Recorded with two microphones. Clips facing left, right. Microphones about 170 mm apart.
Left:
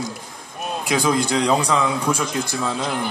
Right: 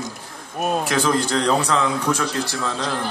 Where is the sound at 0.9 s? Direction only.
15° left (ahead or behind).